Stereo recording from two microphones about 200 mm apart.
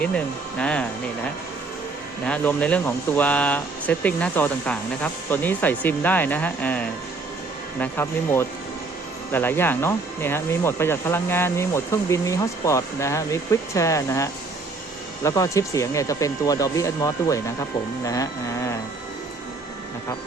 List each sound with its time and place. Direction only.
0.6 s speech: 5° left (ahead or behind)
2.2 s speech: 5° left (ahead or behind)